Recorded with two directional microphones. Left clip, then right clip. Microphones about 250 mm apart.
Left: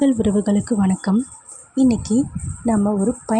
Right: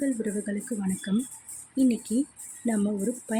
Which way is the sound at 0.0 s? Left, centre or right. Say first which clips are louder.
Left 11 dB; left.